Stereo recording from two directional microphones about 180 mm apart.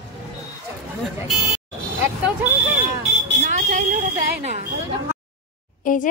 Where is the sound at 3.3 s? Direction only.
45° right (ahead or behind).